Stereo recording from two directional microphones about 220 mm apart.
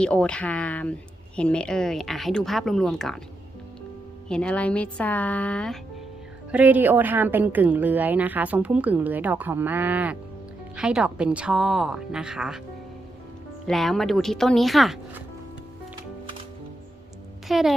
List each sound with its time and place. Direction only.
0.0 s speech: 5° left (ahead or behind)
4.3 s speech: 5° left (ahead or behind)
6.5 s a woman's voice: 5° right (ahead or behind)
13.7 s speech: centre (ahead or behind)
17.5 s speech: centre (ahead or behind)